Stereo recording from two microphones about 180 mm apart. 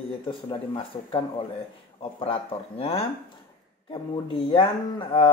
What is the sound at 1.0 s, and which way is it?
Speech, 30° left (ahead or behind).